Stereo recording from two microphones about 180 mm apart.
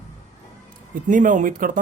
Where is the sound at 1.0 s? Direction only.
45° right (ahead or behind).